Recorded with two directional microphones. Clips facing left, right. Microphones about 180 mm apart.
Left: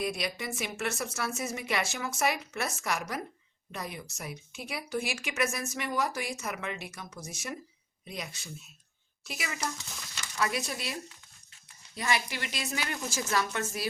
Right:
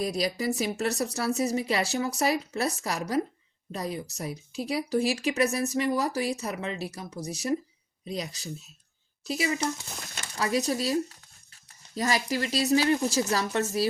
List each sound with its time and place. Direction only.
0.0 s speech: 35° right (ahead or behind)
10.0 s speech: 50° right (ahead or behind)
10.3 s speech: 35° right (ahead or behind)